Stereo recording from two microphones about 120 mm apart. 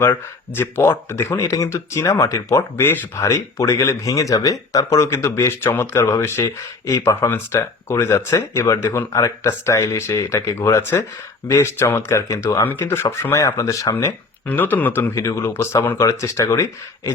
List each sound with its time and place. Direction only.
0.0 s speech: 20° left (ahead or behind)
13.9 s speech: 15° left (ahead or behind)